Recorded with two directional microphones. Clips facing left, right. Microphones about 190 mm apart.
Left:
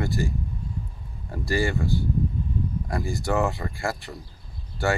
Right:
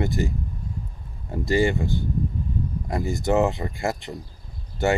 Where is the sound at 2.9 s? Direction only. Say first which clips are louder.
Right 5 dB; 20° right (ahead or behind).